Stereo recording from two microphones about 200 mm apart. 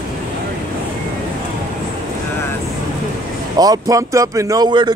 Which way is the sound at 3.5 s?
20° right (ahead or behind).